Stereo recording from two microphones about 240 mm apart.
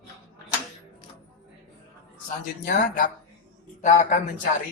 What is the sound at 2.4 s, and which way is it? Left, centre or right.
Speech, left.